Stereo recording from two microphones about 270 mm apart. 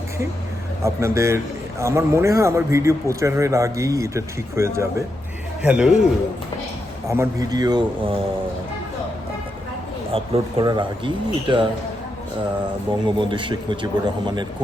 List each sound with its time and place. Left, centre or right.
0.9 s a man's voice: centre
7.1 s a man's voice: centre
10.1 s a man's voice: right
13.1 s a man's voice: centre